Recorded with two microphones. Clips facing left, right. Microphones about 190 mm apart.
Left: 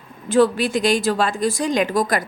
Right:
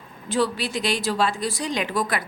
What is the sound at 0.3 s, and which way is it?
A woman's voice, 50° left (ahead or behind).